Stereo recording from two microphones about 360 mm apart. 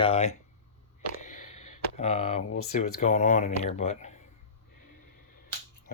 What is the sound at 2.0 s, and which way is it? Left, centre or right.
Speech, centre.